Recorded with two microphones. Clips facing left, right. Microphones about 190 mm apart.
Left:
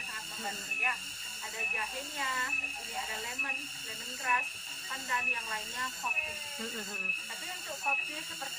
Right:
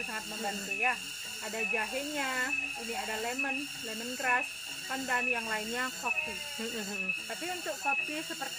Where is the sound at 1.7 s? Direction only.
60° right (ahead or behind).